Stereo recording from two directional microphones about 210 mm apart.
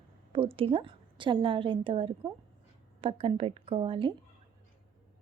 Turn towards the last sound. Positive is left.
turn(degrees=-25)  # may be behind; listen again after turning